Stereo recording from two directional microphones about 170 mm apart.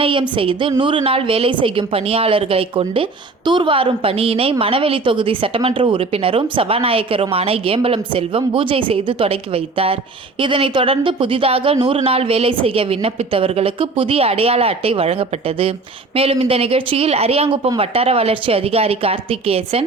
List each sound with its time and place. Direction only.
0.0 s a woman's voice: 30° right (ahead or behind)